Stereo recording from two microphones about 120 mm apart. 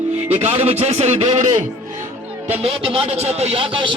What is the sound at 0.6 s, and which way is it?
A man's voice, 60° right (ahead or behind).